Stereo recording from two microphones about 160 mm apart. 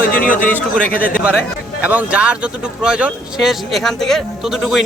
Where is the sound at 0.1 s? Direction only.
60° left (ahead or behind).